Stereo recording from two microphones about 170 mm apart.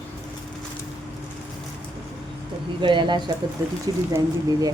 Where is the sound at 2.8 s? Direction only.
25° right (ahead or behind).